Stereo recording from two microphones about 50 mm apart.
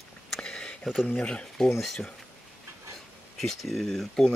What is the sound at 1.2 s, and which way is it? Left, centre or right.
Speech, left.